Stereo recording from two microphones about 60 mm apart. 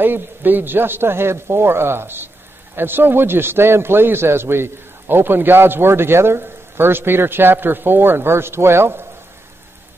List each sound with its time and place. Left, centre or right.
0.0 s speech: right